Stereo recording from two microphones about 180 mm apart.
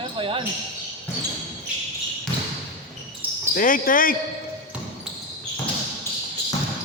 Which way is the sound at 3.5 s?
50° left (ahead or behind).